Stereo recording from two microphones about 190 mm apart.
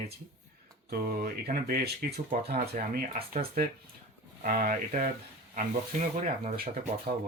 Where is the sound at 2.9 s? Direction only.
45° right (ahead or behind).